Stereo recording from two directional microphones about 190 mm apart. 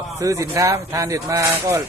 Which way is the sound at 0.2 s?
15° right (ahead or behind).